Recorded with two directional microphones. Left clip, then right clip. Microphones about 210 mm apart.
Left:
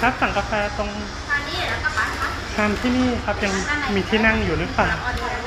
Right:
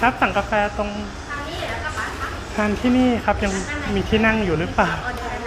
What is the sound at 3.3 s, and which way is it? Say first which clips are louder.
Speech: right 4 dB; 25° right (ahead or behind).